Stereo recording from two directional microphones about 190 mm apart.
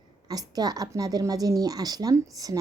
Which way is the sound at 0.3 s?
20° right (ahead or behind).